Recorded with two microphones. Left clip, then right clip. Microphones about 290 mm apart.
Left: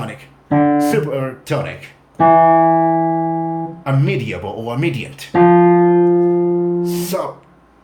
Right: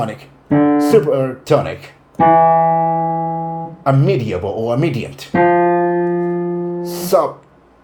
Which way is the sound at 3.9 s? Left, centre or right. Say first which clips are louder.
Right 6 dB; centre.